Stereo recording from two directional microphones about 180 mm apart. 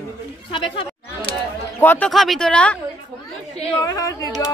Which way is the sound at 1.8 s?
10° left (ahead or behind).